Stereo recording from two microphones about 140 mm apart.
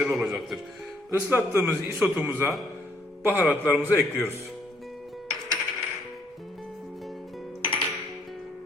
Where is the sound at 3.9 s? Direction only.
20° left (ahead or behind).